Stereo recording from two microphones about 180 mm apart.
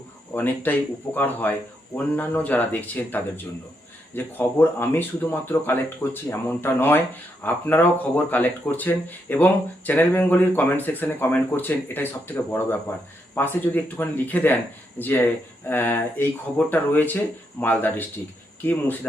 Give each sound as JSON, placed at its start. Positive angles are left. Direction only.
{"t": 0.3, "sound": "speech", "side_deg": 10}